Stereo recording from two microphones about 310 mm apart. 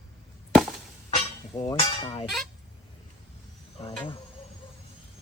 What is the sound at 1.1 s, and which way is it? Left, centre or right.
Speech, centre.